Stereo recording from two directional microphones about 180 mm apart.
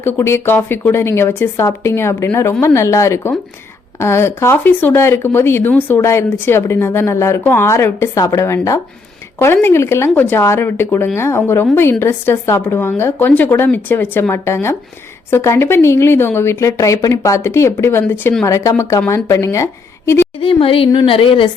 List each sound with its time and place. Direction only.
0.0 s a woman's voice: 15° left (ahead or behind)
20.4 s a woman's voice: 30° left (ahead or behind)